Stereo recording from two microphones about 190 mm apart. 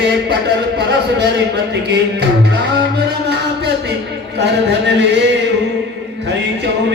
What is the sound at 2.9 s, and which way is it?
Music, 60° right (ahead or behind).